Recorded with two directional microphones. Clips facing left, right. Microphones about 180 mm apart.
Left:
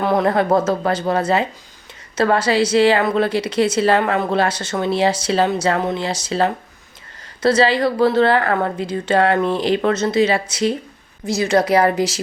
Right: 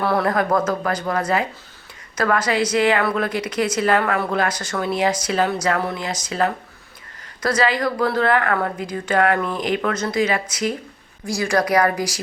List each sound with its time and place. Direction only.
0.0 s a woman's voice: 20° left (ahead or behind)